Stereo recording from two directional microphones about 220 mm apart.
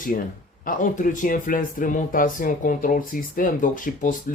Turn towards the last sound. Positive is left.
turn(degrees=40)  # may be behind; listen again after turning